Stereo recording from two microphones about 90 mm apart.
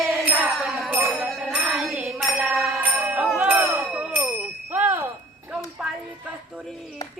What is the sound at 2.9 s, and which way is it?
Music, 15° right (ahead or behind).